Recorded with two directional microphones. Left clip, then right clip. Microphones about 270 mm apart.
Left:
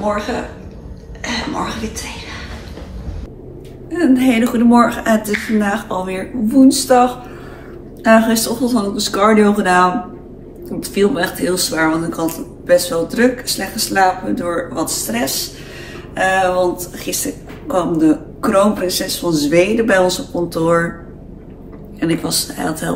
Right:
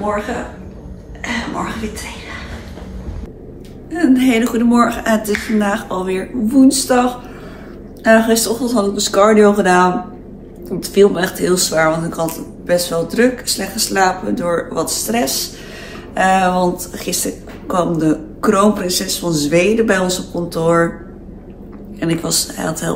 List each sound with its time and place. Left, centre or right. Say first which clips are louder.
3.9 s a woman's voice: even; centre
22.0 s speech: even; centre